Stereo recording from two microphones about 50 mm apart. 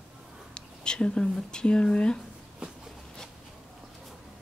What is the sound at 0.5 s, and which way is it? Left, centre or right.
Speech, centre.